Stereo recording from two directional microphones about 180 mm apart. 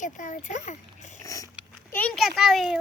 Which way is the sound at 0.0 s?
45° left (ahead or behind).